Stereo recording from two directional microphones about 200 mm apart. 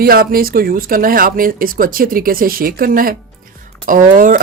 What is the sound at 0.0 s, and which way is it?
Speech, 45° right (ahead or behind).